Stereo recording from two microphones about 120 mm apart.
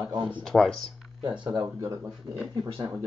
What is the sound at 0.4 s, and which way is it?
Speech, 5° left (ahead or behind).